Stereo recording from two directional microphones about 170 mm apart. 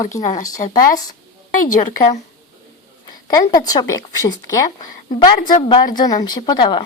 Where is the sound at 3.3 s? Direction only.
20° left (ahead or behind).